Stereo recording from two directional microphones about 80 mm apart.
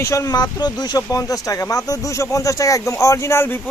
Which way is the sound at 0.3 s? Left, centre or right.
Left.